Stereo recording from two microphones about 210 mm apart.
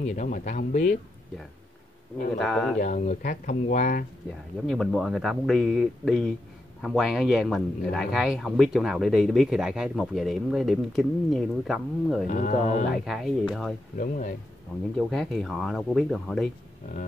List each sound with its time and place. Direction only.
0.0 s speech: 35° left (ahead or behind)
2.3 s speech: 5° left (ahead or behind)
2.8 s speech: 35° left (ahead or behind)
4.6 s speech: centre (ahead or behind)
12.3 s speech: 35° left (ahead or behind)
12.9 s speech: centre (ahead or behind)
13.9 s speech: 40° left (ahead or behind)
15.0 s speech: centre (ahead or behind)